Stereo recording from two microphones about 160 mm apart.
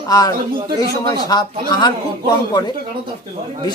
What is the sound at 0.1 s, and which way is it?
Speech, 25° left (ahead or behind).